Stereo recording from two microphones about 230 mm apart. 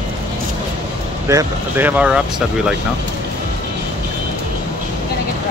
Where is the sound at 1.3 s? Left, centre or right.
Centre.